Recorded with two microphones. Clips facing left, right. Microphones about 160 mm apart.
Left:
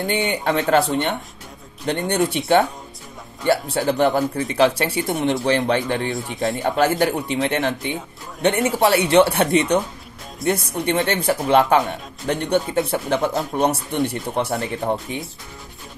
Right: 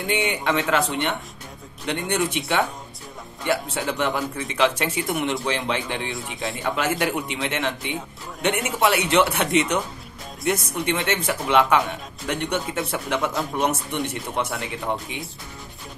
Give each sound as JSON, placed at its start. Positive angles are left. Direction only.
{"t": 0.0, "sound": "speech", "side_deg": 35}